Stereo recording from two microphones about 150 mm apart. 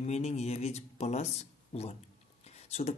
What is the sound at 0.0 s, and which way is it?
Speech, 45° left (ahead or behind).